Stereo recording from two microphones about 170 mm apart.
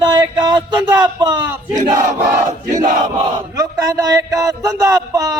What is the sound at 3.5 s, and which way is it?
A man's voice, 20° right (ahead or behind).